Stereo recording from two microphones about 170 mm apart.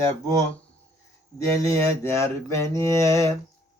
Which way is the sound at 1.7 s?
15° left (ahead or behind).